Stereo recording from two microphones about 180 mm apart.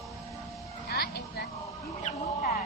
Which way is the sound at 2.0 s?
50° left (ahead or behind).